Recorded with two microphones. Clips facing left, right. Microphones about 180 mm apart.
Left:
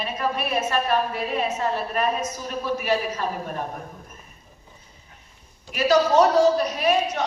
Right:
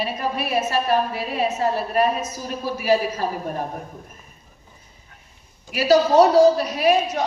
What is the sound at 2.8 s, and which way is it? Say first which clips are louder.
Speech: right 8 dB; 35° right (ahead or behind).